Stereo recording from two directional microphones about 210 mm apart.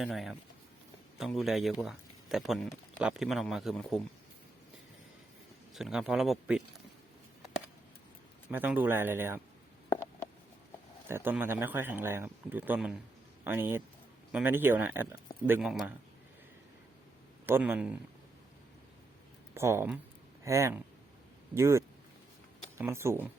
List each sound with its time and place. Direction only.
0.0 s a man's voice: centre (ahead or behind)
5.7 s a man's voice: centre (ahead or behind)
8.4 s speech: 10° right (ahead or behind)
11.1 s a man's voice: 10° right (ahead or behind)
17.4 s speech: 10° right (ahead or behind)
19.5 s speech: 10° right (ahead or behind)